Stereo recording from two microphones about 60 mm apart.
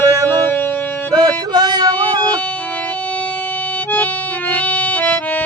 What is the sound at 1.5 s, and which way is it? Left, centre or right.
Music, right.